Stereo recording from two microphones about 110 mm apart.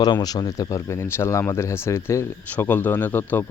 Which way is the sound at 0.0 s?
35° left (ahead or behind).